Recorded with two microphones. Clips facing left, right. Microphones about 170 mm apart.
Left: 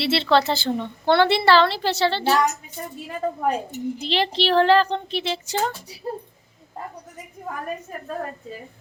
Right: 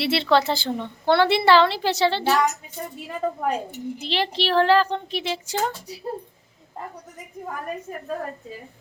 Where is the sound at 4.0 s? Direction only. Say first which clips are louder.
Left 2 dB; 5° right (ahead or behind).